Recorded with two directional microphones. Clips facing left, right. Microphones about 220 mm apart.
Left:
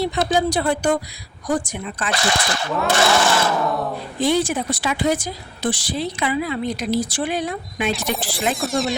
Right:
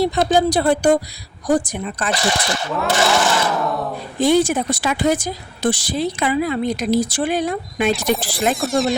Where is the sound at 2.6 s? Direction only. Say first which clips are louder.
Even; 5° right (ahead or behind).